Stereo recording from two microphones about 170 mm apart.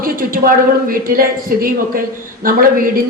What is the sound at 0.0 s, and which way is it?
A woman's voice, 55° right (ahead or behind).